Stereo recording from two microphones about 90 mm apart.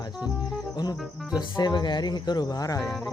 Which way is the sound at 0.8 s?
50° left (ahead or behind).